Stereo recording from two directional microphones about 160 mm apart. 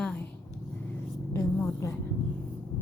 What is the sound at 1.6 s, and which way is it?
Speech, 15° left (ahead or behind).